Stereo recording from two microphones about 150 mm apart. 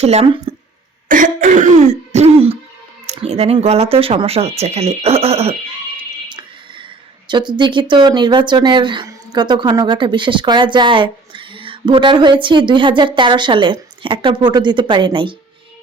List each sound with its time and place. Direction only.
0.0 s speech: 45° right (ahead or behind)
1.0 s speech: 60° right (ahead or behind); by 5.5 s 40° right (ahead or behind)
7.3 s speech: 30° right (ahead or behind)